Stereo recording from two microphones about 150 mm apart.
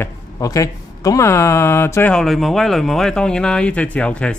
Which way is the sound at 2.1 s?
Centre (ahead or behind).